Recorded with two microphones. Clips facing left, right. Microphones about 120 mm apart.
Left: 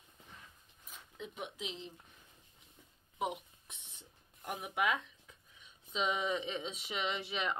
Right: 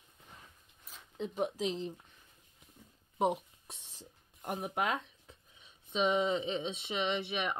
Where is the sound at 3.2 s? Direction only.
35° right (ahead or behind).